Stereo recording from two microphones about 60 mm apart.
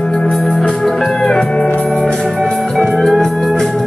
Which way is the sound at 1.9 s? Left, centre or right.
Centre.